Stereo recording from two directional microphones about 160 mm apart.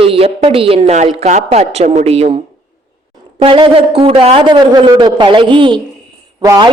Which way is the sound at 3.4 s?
35° right (ahead or behind).